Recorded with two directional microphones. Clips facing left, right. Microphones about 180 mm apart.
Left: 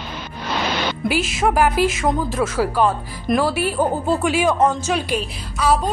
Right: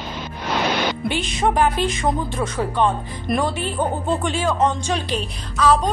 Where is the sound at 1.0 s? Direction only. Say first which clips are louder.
Left 5 dB; 5° left (ahead or behind).